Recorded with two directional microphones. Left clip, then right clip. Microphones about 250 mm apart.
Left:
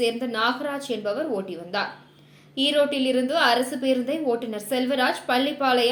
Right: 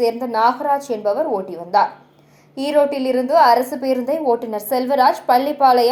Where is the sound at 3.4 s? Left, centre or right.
Centre.